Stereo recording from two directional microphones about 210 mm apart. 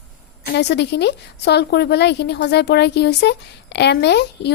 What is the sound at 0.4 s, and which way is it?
A woman's voice, 55° left (ahead or behind).